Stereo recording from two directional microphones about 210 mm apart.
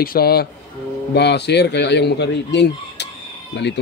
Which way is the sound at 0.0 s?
45° left (ahead or behind).